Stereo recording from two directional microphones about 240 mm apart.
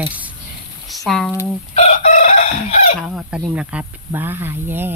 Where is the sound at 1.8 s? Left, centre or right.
Left.